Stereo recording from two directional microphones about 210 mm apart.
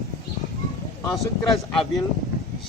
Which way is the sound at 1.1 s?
Centre (ahead or behind).